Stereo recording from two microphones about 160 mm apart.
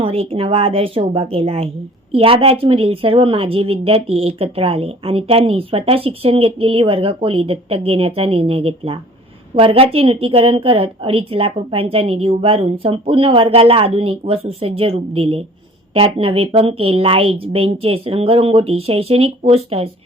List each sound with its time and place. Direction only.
0.0 s a woman's voice: 35° right (ahead or behind)